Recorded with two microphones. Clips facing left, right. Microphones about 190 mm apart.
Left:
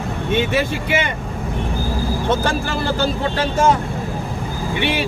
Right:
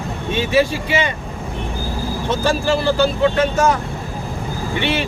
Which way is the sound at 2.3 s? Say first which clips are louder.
Right 4 dB; 55° left (ahead or behind).